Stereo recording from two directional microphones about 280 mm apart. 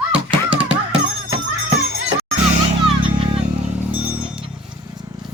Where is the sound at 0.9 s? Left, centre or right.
Centre.